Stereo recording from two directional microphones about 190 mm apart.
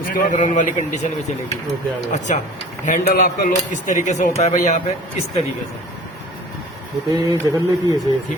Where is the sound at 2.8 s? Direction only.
45° left (ahead or behind).